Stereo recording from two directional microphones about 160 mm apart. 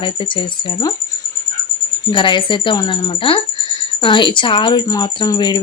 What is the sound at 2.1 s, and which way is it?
Speech, 30° left (ahead or behind).